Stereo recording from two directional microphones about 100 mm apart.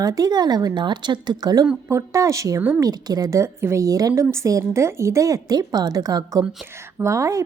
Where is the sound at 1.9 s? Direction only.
30° right (ahead or behind).